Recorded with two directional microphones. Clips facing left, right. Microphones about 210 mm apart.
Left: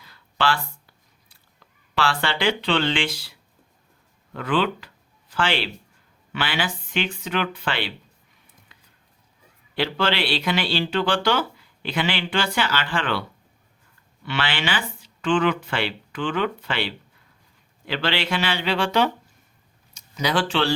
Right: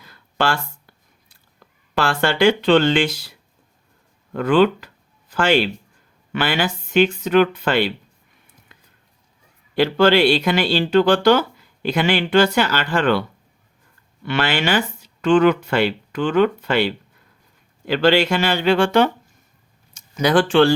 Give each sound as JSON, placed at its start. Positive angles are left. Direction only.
{"t": 0.0, "sound": "a sound", "side_deg": -45}
{"t": 1.5, "sound": "speech", "side_deg": -45}
{"t": 4.4, "sound": "speech", "side_deg": -45}
{"t": 9.7, "sound": "speech", "side_deg": -45}
{"t": 14.3, "sound": "speech", "side_deg": -45}